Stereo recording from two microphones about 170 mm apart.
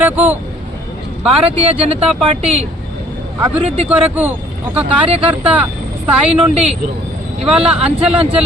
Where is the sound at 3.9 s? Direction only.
10° right (ahead or behind).